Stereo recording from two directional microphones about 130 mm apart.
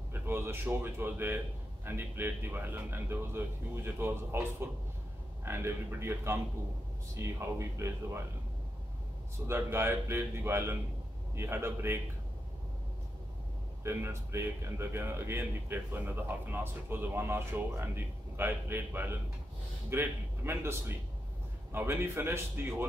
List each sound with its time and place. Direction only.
0.1 s a man's voice: 20° right (ahead or behind)
9.5 s a man's voice: 20° right (ahead or behind)
13.8 s speech: 20° right (ahead or behind)
21.7 s a man's voice: 20° right (ahead or behind)